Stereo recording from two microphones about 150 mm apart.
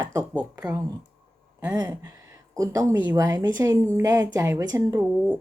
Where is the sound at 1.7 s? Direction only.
20° right (ahead or behind).